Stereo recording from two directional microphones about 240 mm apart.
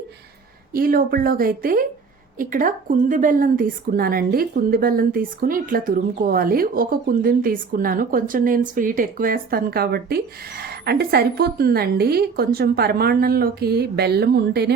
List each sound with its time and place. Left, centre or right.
0.7 s a woman's voice: right